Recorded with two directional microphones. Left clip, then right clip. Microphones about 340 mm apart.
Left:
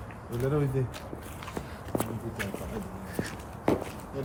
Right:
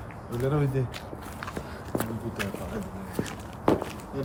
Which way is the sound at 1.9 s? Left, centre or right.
Centre.